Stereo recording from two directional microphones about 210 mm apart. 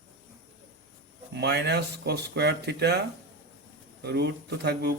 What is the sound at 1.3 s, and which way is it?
A man's voice, 50° right (ahead or behind).